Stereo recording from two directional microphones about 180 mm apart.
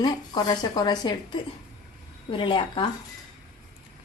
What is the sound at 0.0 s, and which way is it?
Speech, 25° left (ahead or behind).